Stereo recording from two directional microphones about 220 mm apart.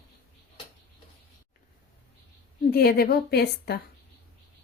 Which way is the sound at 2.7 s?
45° left (ahead or behind).